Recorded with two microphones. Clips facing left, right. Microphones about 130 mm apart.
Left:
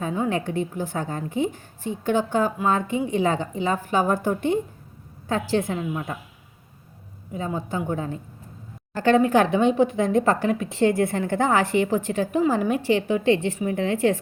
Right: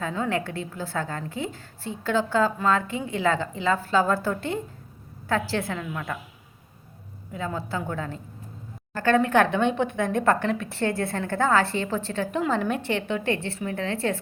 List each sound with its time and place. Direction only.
0.0 s a woman's voice: 15° left (ahead or behind)
7.3 s a woman's voice: 20° left (ahead or behind)
9.8 s a woman's voice: 60° right (ahead or behind)
10.4 s a woman's voice: 15° left (ahead or behind)